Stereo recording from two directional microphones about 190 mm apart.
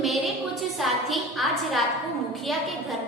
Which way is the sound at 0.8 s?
Centre (ahead or behind).